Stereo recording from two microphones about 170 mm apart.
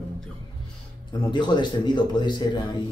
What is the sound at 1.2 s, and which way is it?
A man's voice, 25° left (ahead or behind).